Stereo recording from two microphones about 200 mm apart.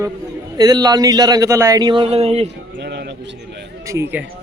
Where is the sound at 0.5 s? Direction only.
20° right (ahead or behind).